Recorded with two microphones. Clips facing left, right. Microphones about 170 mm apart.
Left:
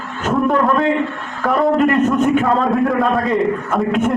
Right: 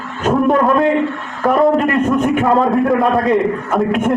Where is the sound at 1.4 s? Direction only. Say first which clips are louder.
Right 2 dB; 5° right (ahead or behind).